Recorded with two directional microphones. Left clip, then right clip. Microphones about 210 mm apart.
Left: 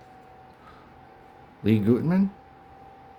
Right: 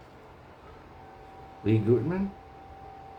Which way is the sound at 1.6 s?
50° left (ahead or behind).